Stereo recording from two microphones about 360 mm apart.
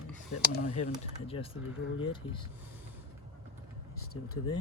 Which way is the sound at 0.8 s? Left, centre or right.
Centre.